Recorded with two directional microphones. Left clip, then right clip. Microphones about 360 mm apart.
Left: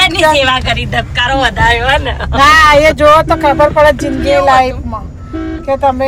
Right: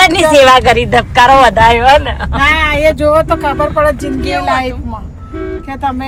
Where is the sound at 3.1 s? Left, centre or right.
Centre.